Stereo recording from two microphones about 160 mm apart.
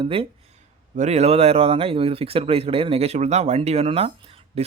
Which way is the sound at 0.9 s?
45° right (ahead or behind).